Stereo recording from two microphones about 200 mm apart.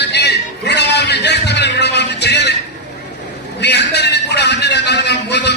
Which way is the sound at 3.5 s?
55° left (ahead or behind).